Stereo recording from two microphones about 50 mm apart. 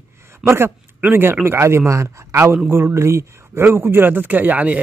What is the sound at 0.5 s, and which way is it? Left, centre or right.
Speech, right.